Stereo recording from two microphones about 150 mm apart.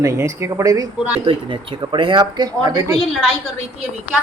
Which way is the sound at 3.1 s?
Centre (ahead or behind).